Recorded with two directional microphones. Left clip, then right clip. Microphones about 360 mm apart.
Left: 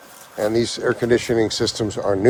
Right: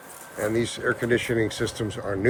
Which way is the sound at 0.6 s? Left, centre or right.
Centre.